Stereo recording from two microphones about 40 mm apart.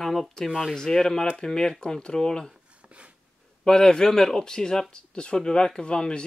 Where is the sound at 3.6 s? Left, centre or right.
Centre.